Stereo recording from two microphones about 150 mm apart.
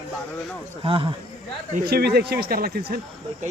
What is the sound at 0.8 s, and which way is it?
Speech, 35° right (ahead or behind).